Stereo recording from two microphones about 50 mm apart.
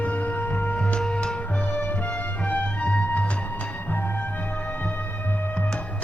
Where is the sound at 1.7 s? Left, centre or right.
Left.